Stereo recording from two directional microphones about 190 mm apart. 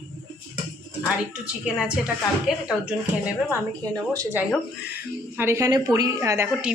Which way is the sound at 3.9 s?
20° right (ahead or behind).